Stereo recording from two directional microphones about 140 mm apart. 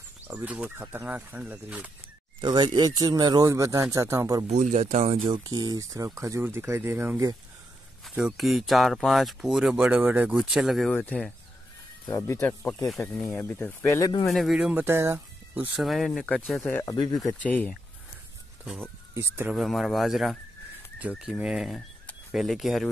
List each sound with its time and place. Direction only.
0.3 s speech: 10° right (ahead or behind)
2.4 s speech: 30° right (ahead or behind)
4.5 s speech: 55° right (ahead or behind)
5.3 s speech: 30° right (ahead or behind)
8.1 s speech: 5° right (ahead or behind)
11.0 s speech: 10° left (ahead or behind)
14.2 s speech: centre (ahead or behind)
15.7 s speech: centre (ahead or behind)
16.7 s speech: 25° left (ahead or behind)
17.3 s speech: 10° left (ahead or behind)
18.6 s speech: 15° right (ahead or behind)
19.5 s speech: centre (ahead or behind)